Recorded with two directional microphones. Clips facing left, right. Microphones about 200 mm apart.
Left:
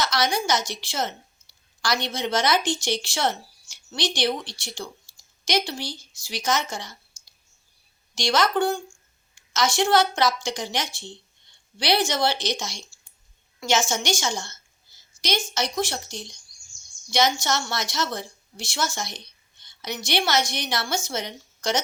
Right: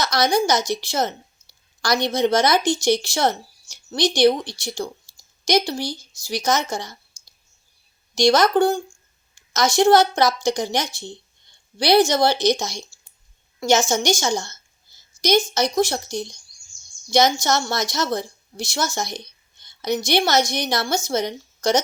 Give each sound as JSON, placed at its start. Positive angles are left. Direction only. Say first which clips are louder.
{"t": 0.0, "sound": "a woman's voice", "louder": "right 5 dB", "side_deg": -40}